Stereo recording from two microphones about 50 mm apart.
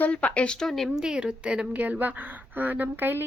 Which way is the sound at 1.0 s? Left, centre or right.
Centre.